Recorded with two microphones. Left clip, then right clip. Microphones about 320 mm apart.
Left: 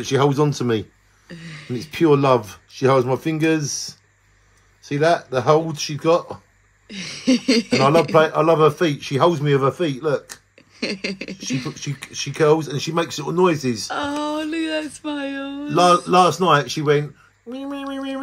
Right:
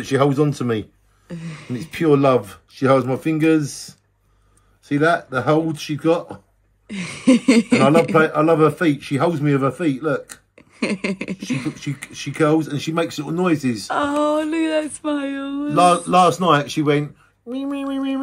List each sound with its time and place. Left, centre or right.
0.1 s speech: centre
1.3 s a sound: centre
1.7 s speech: centre
4.8 s speech: centre
6.9 s speech: centre
8.1 s speech: centre
10.5 s a sound: centre
12.9 s speech: centre
13.8 s speech: centre
15.7 s speech: centre